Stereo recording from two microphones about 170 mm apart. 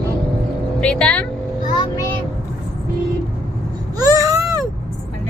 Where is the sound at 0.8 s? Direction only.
5° left (ahead or behind).